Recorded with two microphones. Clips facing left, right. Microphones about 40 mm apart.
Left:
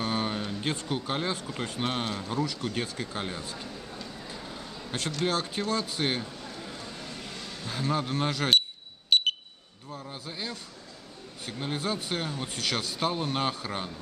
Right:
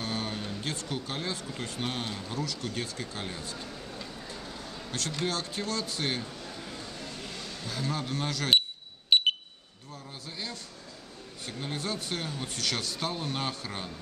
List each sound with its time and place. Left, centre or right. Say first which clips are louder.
0.0 s speech: left 4 dB; centre
4.3 s a sound: left 1 dB; centre
5.2 s speech: left 4 dB; centre
6.8 s vehicle: left 1 dB; centre
7.6 s speech: left 4 dB; centre
9.1 s alarm: even; centre
10.2 s vehicle: left 1 dB; centre
11.4 s speech: left 3 dB; centre